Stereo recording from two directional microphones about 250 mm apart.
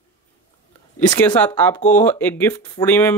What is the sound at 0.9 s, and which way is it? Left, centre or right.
Speech, centre.